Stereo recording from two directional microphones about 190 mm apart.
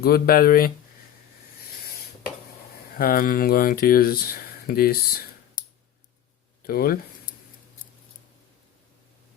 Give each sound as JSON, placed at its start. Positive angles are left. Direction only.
{"t": 0.0, "sound": "speech", "side_deg": 55}
{"t": 3.0, "sound": "speech", "side_deg": 50}
{"t": 6.6, "sound": "speech", "side_deg": 50}